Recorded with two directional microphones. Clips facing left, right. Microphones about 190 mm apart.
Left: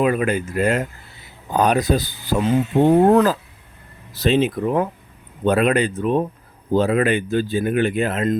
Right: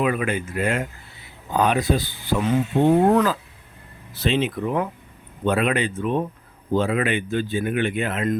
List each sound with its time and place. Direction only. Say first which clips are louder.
0.0 s speech: left 4 dB; 40° left (ahead or behind)